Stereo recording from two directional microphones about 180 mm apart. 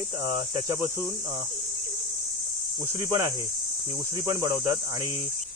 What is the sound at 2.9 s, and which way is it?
Cricket, 15° right (ahead or behind).